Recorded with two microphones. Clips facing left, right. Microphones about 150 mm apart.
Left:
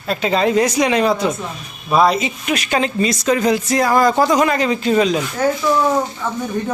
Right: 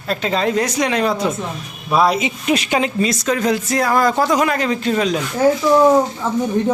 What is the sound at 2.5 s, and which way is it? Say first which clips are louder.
Speech: right 4 dB; 25° right (ahead or behind).